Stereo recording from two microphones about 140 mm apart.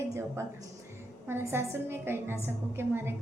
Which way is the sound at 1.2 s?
15° right (ahead or behind).